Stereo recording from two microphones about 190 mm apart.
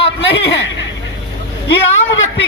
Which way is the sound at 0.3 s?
75° left (ahead or behind).